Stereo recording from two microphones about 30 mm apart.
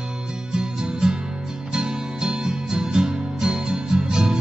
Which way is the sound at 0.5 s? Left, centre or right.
Right.